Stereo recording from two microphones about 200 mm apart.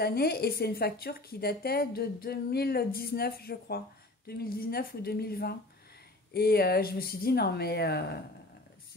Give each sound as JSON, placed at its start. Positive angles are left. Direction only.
{"t": 0.0, "sound": "a woman's voice", "side_deg": 50}